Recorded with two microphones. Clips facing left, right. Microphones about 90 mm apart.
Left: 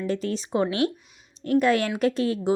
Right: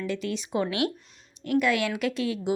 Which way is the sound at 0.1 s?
40° left (ahead or behind).